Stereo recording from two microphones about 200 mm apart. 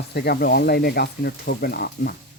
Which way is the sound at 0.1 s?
50° left (ahead or behind).